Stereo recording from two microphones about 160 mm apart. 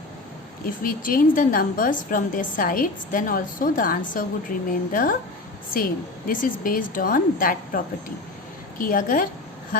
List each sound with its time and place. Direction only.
0.6 s a woman's voice: 60° left (ahead or behind)
8.8 s a woman's voice: 60° left (ahead or behind)